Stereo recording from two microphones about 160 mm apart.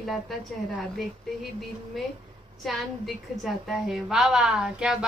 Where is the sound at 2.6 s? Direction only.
Centre (ahead or behind).